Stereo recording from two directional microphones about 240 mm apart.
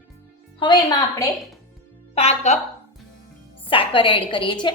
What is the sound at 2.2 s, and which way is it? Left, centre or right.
Speech, left.